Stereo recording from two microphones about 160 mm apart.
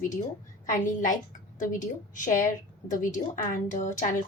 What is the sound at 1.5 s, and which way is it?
A woman's voice, 55° left (ahead or behind).